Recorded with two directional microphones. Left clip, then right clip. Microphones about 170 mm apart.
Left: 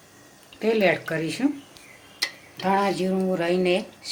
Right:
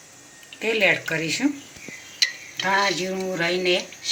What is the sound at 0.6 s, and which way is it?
Speech, 30° left (ahead or behind).